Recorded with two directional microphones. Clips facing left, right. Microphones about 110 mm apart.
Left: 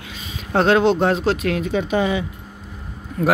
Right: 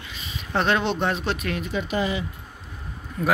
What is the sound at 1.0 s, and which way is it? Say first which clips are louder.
Speech: left 7 dB; 90° left.